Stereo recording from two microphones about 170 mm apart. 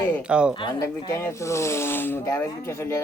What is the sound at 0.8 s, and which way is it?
Speech, 15° left (ahead or behind).